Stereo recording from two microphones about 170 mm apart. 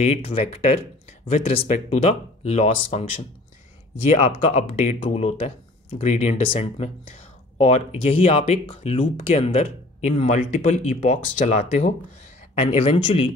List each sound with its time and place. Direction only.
0.0 s speech: 35° left (ahead or behind)